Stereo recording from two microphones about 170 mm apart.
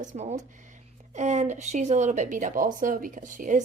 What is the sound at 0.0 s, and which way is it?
Speech, 45° right (ahead or behind).